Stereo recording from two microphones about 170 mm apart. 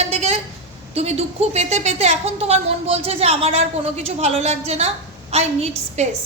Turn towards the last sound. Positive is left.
turn(degrees=-40)  # may be behind; listen again after turning